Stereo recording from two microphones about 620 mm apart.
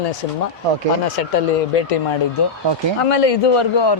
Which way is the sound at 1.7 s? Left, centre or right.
Left.